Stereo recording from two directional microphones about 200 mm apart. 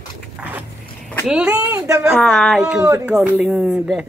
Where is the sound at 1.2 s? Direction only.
5° right (ahead or behind).